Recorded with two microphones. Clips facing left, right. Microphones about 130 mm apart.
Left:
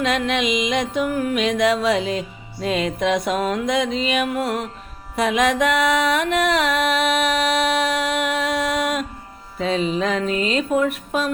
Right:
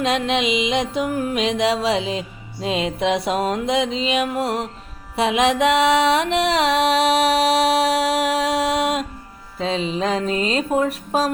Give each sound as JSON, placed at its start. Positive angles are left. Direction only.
{"t": 0.0, "sound": "music", "side_deg": -30}